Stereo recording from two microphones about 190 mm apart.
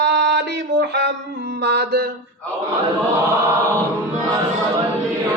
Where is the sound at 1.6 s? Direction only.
60° right (ahead or behind).